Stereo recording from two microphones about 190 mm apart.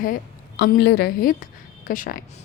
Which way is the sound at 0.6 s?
60° left (ahead or behind).